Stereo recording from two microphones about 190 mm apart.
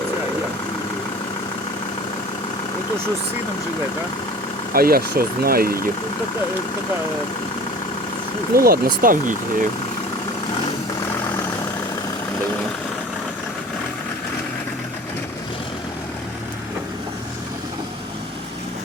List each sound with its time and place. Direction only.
4.7 s speech: 50° right (ahead or behind)
8.5 s speech: 50° right (ahead or behind)